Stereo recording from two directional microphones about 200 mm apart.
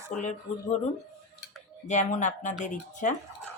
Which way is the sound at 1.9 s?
35° left (ahead or behind).